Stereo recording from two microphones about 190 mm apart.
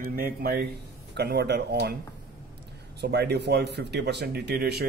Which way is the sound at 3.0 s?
60° right (ahead or behind).